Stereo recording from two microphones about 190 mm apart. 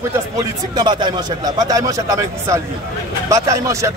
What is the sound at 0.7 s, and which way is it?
A man's voice, 25° right (ahead or behind).